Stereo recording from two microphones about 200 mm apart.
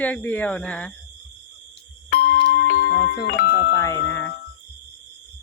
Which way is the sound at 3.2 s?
55° left (ahead or behind).